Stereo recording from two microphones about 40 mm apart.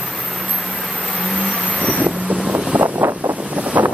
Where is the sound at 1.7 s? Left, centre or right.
Left.